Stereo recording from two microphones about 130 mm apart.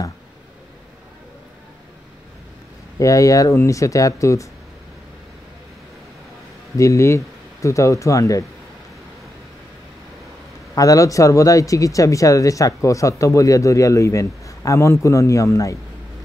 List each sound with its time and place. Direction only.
3.0 s speech: 25° left (ahead or behind)
6.8 s speech: 25° left (ahead or behind)
10.7 s speech: 25° left (ahead or behind)